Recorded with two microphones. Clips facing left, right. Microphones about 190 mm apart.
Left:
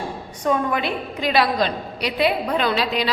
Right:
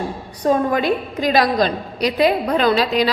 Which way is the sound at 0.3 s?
35° right (ahead or behind).